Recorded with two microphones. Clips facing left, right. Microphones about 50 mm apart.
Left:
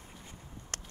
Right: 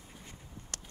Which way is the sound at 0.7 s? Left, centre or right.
Left.